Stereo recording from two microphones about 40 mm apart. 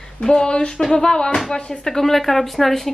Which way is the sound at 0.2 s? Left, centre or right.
Centre.